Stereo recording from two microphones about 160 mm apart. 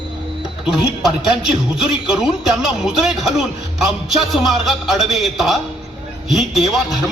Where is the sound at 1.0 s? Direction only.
5° right (ahead or behind).